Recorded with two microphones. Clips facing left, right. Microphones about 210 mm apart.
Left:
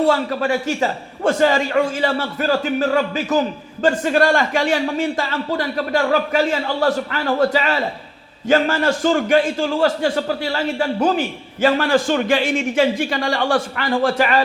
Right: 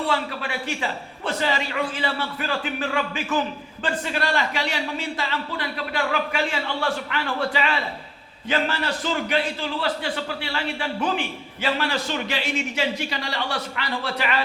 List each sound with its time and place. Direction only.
0.0 s a man's voice: 45° left (ahead or behind)